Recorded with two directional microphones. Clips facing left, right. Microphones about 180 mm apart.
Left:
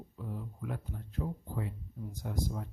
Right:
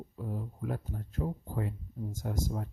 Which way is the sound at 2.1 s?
45° right (ahead or behind).